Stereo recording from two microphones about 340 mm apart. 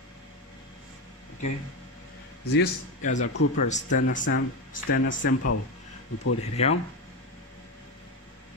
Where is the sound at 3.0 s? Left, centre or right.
Left.